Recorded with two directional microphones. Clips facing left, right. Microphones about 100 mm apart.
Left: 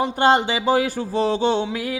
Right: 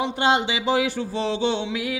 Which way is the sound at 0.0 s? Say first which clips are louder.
Left 4 dB; 45° left (ahead or behind).